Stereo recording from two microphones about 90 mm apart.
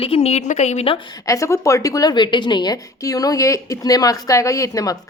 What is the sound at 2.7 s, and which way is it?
A woman's voice, 40° left (ahead or behind).